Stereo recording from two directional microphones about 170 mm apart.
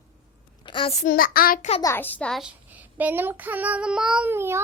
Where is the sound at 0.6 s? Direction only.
30° left (ahead or behind).